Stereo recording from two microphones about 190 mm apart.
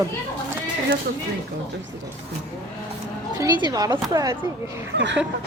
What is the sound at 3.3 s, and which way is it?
A woman's voice, 20° right (ahead or behind).